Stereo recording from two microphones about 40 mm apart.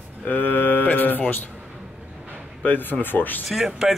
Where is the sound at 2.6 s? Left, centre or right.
Left.